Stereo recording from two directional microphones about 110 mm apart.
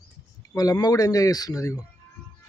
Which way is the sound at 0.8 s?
35° left (ahead or behind).